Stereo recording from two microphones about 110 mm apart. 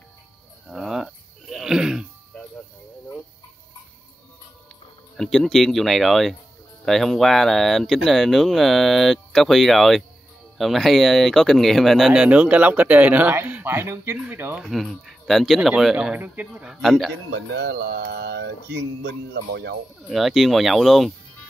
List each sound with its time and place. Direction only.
0.7 s a sound: 5° right (ahead or behind)
2.3 s music: 15° left (ahead or behind)
5.1 s speech: 5° left (ahead or behind); by 14.6 s 15° right (ahead or behind)
14.6 s speech: centre (ahead or behind)
16.8 s speech: centre (ahead or behind)
20.1 s speech: centre (ahead or behind)